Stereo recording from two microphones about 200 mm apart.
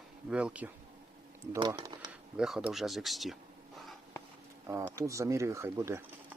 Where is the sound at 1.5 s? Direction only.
20° right (ahead or behind).